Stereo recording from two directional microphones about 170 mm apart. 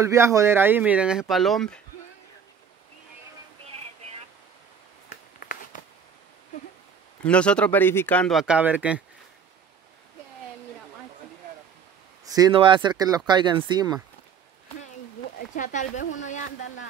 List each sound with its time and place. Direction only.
0.0 s speech: 15° right (ahead or behind); by 1.8 s centre (ahead or behind)
5.1 s a sound: 60° left (ahead or behind)
7.2 s speech: 5° left (ahead or behind)
12.3 s speech: 25° right (ahead or behind)
15.5 s speech: 45° left (ahead or behind)